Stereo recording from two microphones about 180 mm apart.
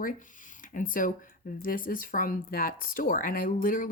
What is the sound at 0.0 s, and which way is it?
Speech, 45° left (ahead or behind).